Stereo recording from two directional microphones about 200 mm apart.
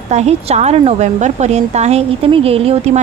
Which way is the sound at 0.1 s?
30° right (ahead or behind).